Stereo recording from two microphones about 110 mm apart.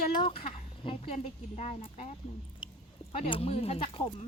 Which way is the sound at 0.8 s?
55° left (ahead or behind).